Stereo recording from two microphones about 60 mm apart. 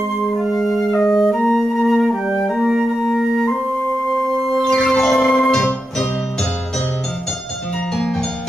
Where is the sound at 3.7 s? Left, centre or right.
Left.